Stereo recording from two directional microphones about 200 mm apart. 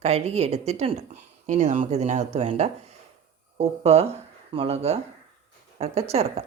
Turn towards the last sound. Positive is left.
turn(degrees=-30)  # may be behind; listen again after turning